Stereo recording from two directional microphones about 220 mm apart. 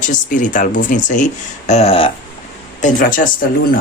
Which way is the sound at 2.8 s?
40° left (ahead or behind).